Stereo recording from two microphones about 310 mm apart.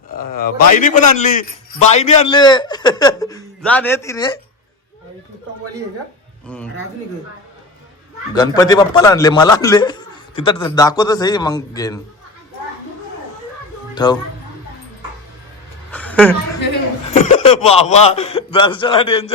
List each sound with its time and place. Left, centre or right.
0.1 s a man's voice: left; by 4.3 s centre
8.4 s a man's voice: centre
13.9 s speech: centre
15.9 s a sound: centre
17.1 s a man's voice: left